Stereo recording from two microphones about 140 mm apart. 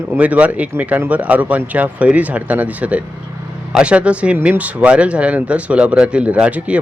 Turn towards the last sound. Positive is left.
turn(degrees=-10)  # may be behind; listen again after turning